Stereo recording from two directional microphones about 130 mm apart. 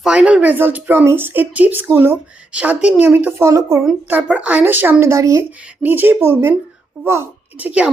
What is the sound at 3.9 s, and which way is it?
Speech, 10° right (ahead or behind).